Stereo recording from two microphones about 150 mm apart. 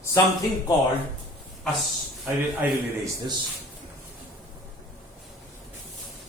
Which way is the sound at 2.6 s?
10° right (ahead or behind).